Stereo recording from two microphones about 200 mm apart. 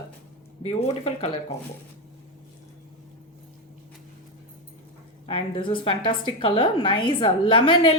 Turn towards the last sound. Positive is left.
turn(degrees=25)  # may be behind; listen again after turning